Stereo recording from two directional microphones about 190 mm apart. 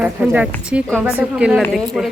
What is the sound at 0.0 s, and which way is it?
Speech, 5° right (ahead or behind).